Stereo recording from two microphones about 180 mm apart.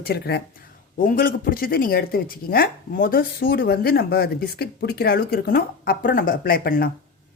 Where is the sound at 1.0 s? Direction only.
50° left (ahead or behind).